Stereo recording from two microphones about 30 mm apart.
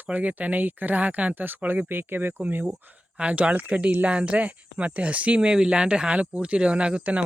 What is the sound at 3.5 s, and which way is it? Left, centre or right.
Speech, right.